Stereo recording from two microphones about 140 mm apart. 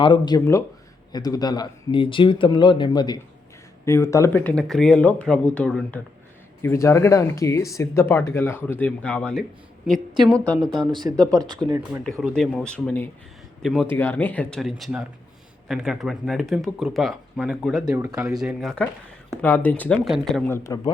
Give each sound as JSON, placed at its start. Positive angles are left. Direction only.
{"t": 0.0, "sound": "speech", "side_deg": 30}
{"t": 3.8, "sound": "speech", "side_deg": 20}
{"t": 6.6, "sound": "speech", "side_deg": 20}
{"t": 10.8, "sound": "speech", "side_deg": -30}
{"t": 12.2, "sound": "speech", "side_deg": 5}
{"t": 13.9, "sound": "speech", "side_deg": 15}
{"t": 14.6, "sound": "speech", "side_deg": 0}
{"t": 19.4, "sound": "speech", "side_deg": 15}
{"t": 20.1, "sound": "speech", "side_deg": 0}
{"t": 20.5, "sound": "speech", "side_deg": 25}